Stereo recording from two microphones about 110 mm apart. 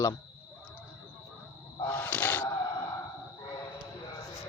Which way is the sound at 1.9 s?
15° left (ahead or behind).